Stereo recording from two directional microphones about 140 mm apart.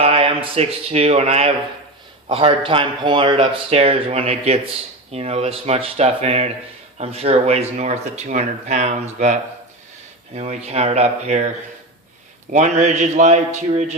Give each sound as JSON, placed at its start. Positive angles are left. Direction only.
{"t": 0.0, "sound": "a man's voice", "side_deg": -45}